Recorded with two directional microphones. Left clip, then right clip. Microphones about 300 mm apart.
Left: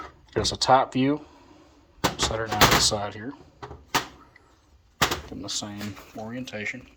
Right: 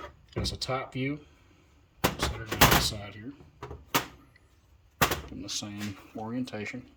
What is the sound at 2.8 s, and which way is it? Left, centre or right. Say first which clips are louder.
Speech: left 9 dB; centre.